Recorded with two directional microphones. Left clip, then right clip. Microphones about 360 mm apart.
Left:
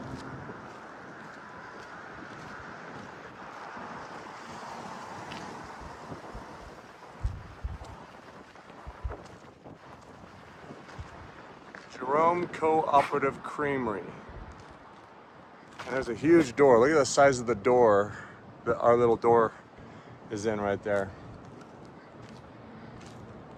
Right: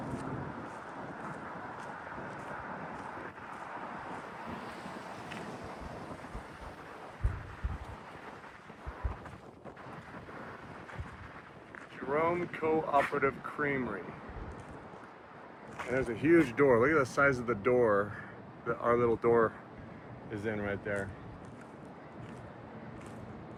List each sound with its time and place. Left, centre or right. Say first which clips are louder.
12.1 s speech: left 6 dB; centre
16.0 s speech: left 4 dB; centre
20.5 s speech: left 7 dB; left